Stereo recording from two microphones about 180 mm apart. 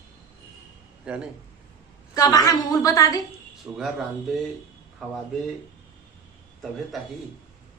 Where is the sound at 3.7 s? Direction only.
10° right (ahead or behind).